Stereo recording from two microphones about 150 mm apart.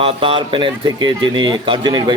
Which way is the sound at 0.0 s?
40° right (ahead or behind).